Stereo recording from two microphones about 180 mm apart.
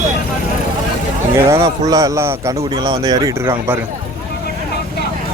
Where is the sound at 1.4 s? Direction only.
15° right (ahead or behind).